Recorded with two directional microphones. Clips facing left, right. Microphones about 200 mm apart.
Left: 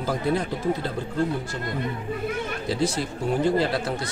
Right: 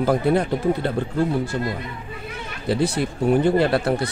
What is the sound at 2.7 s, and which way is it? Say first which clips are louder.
A man's voice: right 5 dB; 60° right (ahead or behind).